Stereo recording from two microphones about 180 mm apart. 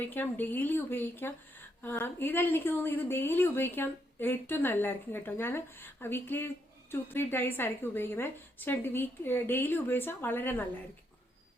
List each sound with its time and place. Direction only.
0.0 s a woman's voice: 10° left (ahead or behind)